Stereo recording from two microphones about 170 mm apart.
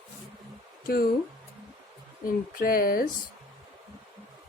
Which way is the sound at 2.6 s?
60° left (ahead or behind).